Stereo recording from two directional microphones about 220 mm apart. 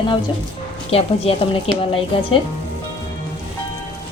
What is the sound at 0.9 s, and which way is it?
Speech, 25° left (ahead or behind).